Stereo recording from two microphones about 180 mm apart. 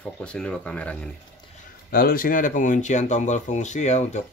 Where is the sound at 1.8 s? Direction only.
55° left (ahead or behind).